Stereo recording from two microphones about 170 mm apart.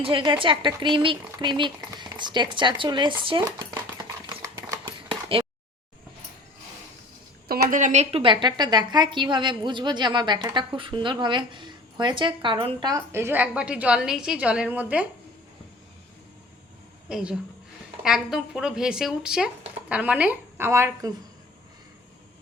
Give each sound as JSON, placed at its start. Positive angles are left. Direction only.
{"t": 0.0, "sound": "a woman's voice", "side_deg": -30}
{"t": 3.4, "sound": "a sound", "side_deg": -20}
{"t": 7.6, "sound": "a woman's voice", "side_deg": -50}
{"t": 12.9, "sound": "a woman's voice", "side_deg": -15}
{"t": 17.1, "sound": "a woman's voice", "side_deg": -5}